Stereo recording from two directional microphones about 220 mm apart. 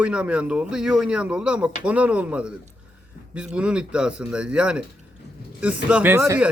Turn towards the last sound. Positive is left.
turn(degrees=-10)  # may be behind; listen again after turning